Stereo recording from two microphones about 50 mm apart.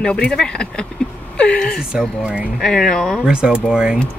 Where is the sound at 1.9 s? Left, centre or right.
Centre.